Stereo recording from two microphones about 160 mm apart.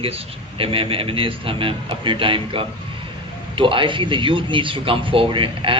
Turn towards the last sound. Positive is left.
turn(degrees=-35)  # may be behind; listen again after turning